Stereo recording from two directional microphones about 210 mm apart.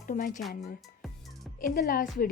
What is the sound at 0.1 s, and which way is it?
Speech, 40° left (ahead or behind).